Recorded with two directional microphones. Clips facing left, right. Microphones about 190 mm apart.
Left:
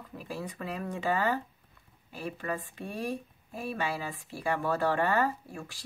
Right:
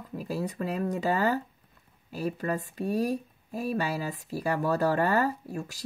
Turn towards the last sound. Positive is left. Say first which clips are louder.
# right 6 dB
turn(degrees=-40)  # may be behind; listen again after turning